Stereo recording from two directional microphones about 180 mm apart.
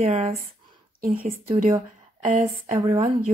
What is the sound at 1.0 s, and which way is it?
Speech, 55° right (ahead or behind).